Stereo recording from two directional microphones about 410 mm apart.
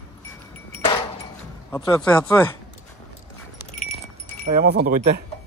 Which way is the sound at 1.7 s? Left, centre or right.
Centre.